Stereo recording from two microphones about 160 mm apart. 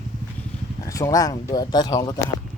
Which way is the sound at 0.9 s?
20° left (ahead or behind).